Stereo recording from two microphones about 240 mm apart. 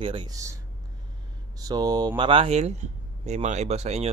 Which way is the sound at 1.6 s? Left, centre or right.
Centre.